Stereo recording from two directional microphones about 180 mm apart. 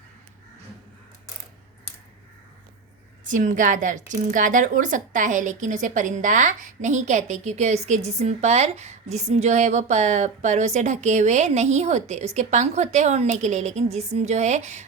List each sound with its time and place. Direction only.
3.2 s a woman's voice: 45° right (ahead or behind)